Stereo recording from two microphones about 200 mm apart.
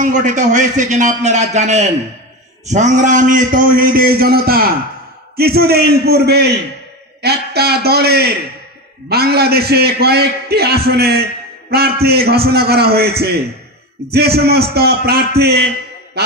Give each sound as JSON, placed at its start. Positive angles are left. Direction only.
{"t": 0.0, "sound": "a man's voice", "side_deg": -40}